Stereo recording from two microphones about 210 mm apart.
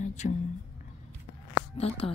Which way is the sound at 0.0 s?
35° left (ahead or behind).